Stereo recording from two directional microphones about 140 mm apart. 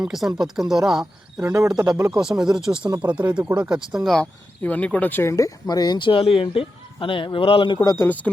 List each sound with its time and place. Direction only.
0.0 s speech: centre (ahead or behind)
1.4 s speech: 20° right (ahead or behind)
1.6 s speech: 5° right (ahead or behind)
2.0 s speech: 25° right (ahead or behind)
2.6 s speech: 5° right (ahead or behind); by 7.8 s 35° left (ahead or behind)
7.9 s speech: 15° left (ahead or behind)